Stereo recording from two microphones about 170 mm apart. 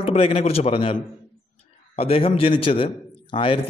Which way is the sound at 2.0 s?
35° left (ahead or behind).